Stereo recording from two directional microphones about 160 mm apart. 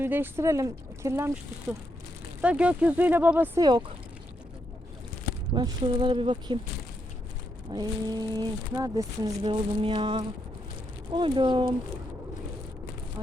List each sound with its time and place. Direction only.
0.0 s speech: 15° right (ahead or behind)
2.4 s speech: 5° right (ahead or behind)
3.6 s speech: 30° right (ahead or behind)
5.5 s speech: 30° right (ahead or behind)
7.7 s speech: 25° right (ahead or behind)